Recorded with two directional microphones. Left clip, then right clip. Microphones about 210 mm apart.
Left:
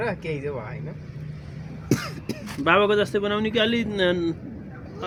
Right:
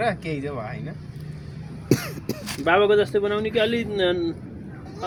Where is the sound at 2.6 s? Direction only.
35° left (ahead or behind).